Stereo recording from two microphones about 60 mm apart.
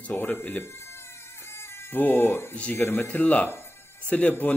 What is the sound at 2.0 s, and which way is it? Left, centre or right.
Speech, left.